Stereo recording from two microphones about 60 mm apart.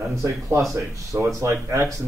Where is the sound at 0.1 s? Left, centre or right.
Right.